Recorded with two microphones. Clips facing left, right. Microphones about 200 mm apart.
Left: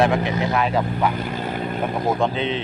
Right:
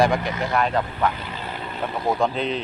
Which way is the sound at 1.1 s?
50° left (ahead or behind).